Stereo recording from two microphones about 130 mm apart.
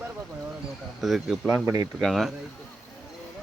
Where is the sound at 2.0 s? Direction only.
Centre (ahead or behind).